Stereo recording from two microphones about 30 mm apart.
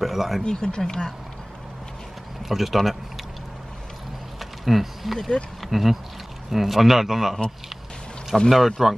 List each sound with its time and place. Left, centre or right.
0.0 s speech: centre
0.4 s speech: left
2.4 s speech: centre
4.4 s a sound: centre
5.6 s a man's voice: centre
8.5 s speech: centre